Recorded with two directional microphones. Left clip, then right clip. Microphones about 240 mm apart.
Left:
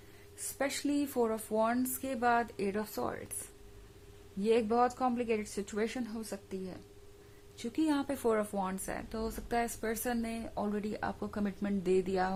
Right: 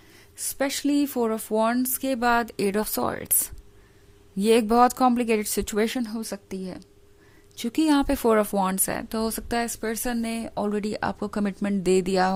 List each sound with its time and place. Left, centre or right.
0.6 s speech: right
4.4 s speech: right